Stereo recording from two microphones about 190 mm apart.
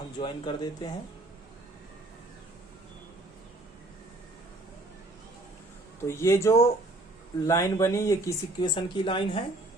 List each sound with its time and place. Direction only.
0.2 s speech: 25° left (ahead or behind)
6.0 s speech: 15° left (ahead or behind)